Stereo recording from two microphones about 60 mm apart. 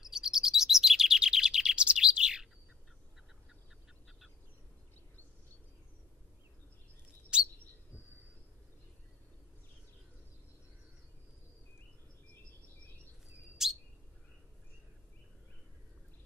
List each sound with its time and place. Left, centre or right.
0.0 s chirp: centre
7.3 s chirp: centre
13.6 s chirp: centre